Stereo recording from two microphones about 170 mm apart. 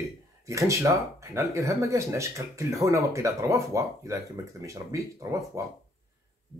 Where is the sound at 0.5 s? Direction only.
20° right (ahead or behind).